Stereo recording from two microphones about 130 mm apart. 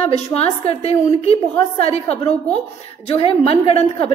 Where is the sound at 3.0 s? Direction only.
45° left (ahead or behind).